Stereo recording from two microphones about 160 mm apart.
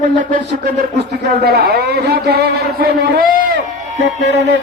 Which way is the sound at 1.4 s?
80° right.